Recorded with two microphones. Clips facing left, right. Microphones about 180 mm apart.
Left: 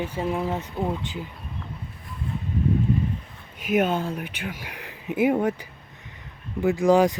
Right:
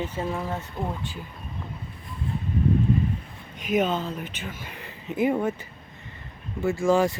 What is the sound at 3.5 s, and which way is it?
Speech, 10° left (ahead or behind).